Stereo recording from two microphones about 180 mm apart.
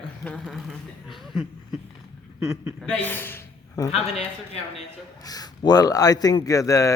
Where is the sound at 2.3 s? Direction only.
15° right (ahead or behind).